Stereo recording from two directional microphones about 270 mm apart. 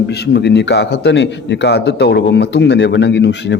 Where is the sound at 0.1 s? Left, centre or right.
Left.